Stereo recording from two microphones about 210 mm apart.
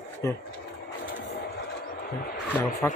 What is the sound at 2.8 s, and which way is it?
Speech, 10° left (ahead or behind).